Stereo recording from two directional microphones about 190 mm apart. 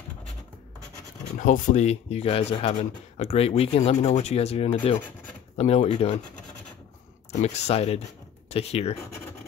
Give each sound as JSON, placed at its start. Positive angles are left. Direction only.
{"t": 1.4, "sound": "speech", "side_deg": 40}
{"t": 7.3, "sound": "speech", "side_deg": 35}